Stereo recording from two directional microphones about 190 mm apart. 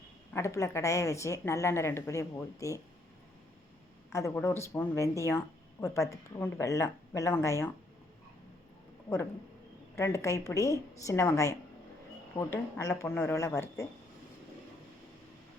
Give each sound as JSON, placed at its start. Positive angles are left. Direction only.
{"t": 0.3, "sound": "a woman's voice", "side_deg": 15}
{"t": 4.1, "sound": "a woman's voice", "side_deg": 15}
{"t": 9.9, "sound": "a woman's voice", "side_deg": 15}